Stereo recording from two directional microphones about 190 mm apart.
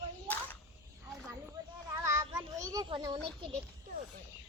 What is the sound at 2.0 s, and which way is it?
Children playing, 15° right (ahead or behind).